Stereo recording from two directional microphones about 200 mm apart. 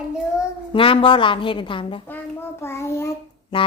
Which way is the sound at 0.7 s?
25° left (ahead or behind).